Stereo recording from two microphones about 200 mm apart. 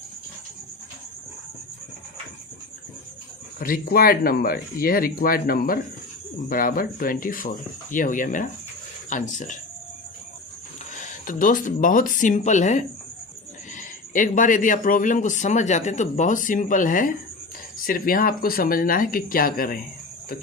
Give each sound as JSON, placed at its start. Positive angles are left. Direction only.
{"t": 3.6, "sound": "speech", "side_deg": 45}
{"t": 10.9, "sound": "speech", "side_deg": 40}